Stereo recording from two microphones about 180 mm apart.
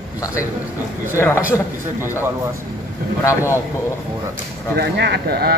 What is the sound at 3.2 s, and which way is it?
Speech, 15° left (ahead or behind).